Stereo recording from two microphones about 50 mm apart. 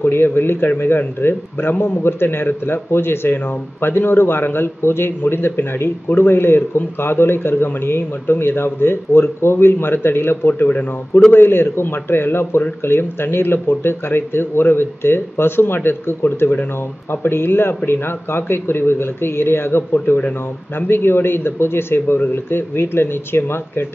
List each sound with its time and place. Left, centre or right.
0.0 s a man's voice: left